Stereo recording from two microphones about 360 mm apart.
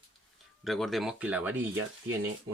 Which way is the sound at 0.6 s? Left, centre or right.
Centre.